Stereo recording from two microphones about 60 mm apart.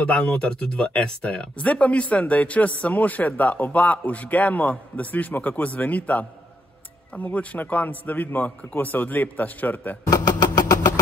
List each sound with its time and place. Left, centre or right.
0.0 s speech: left
10.1 s vehicle: left